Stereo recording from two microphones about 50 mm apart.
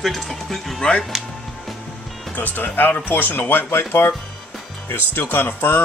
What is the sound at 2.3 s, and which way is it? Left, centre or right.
Speech, left.